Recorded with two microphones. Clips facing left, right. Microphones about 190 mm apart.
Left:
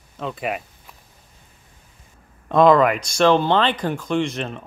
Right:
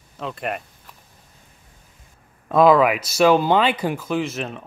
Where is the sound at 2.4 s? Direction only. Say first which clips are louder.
Even; 5° right (ahead or behind).